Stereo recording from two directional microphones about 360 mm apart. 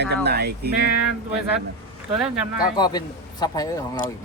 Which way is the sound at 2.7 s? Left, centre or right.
Centre.